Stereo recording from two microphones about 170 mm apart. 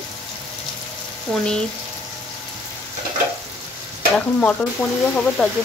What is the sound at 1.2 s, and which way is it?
Speech, 5° left (ahead or behind).